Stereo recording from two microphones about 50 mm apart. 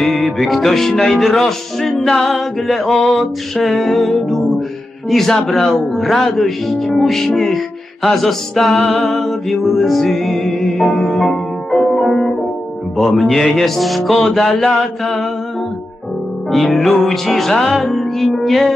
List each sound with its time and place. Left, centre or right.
0.0 s music: centre
16.5 s music: centre